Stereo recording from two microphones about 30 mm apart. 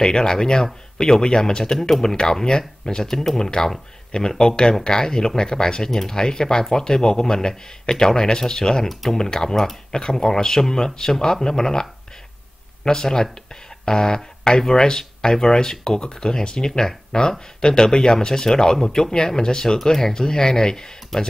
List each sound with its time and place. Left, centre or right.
0.0 s speech: left
1.6 s speech: centre
4.1 s speech: left
5.9 s speech: centre
6.1 s speech: left
13.8 s a sound: left
14.7 s speech: centre
21.1 s speech: centre